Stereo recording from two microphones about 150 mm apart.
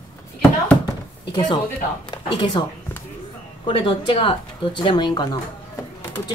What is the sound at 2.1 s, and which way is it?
Speech, 30° left (ahead or behind).